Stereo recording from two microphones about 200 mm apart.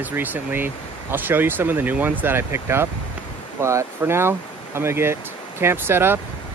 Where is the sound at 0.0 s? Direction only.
10° right (ahead or behind).